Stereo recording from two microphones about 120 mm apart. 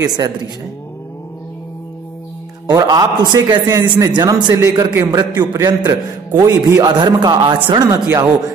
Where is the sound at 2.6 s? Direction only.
35° right (ahead or behind).